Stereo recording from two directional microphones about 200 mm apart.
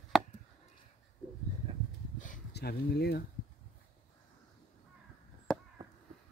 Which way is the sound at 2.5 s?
55° left (ahead or behind).